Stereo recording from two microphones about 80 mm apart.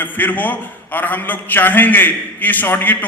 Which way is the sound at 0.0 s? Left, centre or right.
Left.